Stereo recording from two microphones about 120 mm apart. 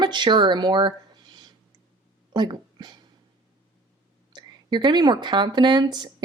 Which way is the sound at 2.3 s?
40° right (ahead or behind).